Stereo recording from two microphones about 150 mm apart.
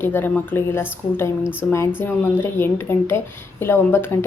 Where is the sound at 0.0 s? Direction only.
15° left (ahead or behind).